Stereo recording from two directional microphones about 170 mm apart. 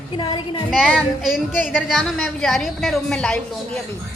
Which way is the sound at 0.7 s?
Centre (ahead or behind).